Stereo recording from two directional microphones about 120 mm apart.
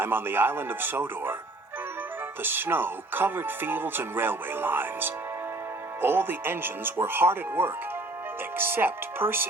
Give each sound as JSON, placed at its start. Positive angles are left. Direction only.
{"t": 0.0, "sound": "speech", "side_deg": -15}
{"t": 2.4, "sound": "speech", "side_deg": -20}